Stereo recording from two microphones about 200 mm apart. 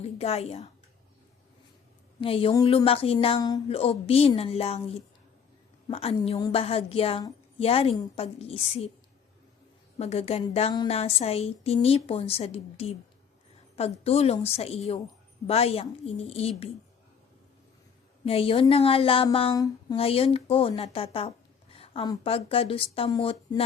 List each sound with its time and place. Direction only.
0.0 s a woman's voice: 30° left (ahead or behind)
2.2 s a woman's voice: 25° left (ahead or behind)
10.0 s a woman's voice: 30° left (ahead or behind)
14.0 s a woman's voice: 30° left (ahead or behind)
18.3 s a woman's voice: 30° left (ahead or behind)
19.5 s speech: 15° left (ahead or behind)
20.0 s a woman's voice: 30° left (ahead or behind)
21.8 s a sound: 30° left (ahead or behind)
22.1 s a woman's voice: 30° left (ahead or behind)